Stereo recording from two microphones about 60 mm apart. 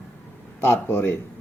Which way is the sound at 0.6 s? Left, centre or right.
Left.